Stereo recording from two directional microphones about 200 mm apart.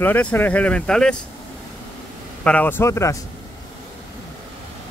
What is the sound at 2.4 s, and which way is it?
Speech, 10° left (ahead or behind).